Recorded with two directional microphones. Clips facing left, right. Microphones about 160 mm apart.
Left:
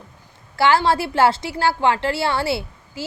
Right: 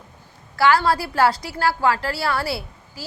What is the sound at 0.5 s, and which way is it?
A woman's voice, 25° left (ahead or behind).